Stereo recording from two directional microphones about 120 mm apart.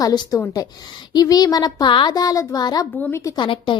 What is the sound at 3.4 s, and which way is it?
Speech, 45° left (ahead or behind).